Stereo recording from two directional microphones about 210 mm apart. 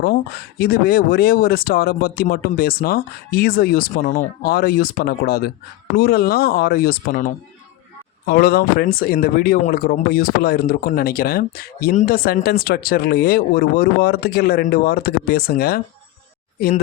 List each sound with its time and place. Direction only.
0.6 s speech: 45° left (ahead or behind)